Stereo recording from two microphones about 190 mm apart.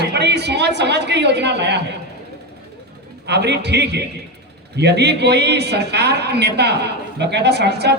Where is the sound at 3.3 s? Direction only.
65° right (ahead or behind).